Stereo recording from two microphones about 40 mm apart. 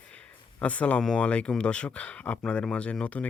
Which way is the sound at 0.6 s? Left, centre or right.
Left.